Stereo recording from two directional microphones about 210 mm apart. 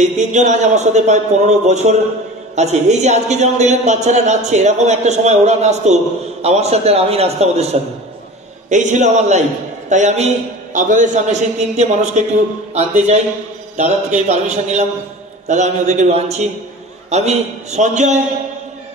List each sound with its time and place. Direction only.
0.0 s a man's voice: 35° right (ahead or behind)